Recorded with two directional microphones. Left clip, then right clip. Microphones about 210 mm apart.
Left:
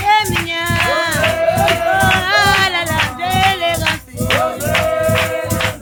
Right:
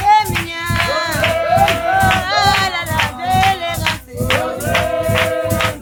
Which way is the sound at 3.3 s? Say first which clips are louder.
Even; centre (ahead or behind).